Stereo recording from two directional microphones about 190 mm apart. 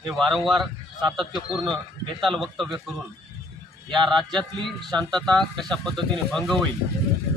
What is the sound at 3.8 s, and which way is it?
Speech, 25° right (ahead or behind).